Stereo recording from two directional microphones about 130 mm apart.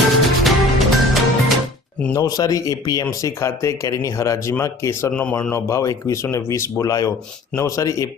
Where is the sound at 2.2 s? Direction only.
30° left (ahead or behind).